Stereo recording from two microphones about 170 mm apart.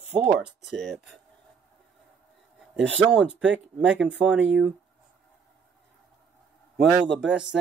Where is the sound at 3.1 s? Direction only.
5° right (ahead or behind).